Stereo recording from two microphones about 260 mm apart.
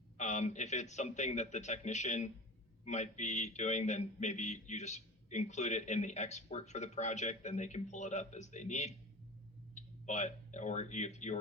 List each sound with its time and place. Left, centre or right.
0.2 s speech: left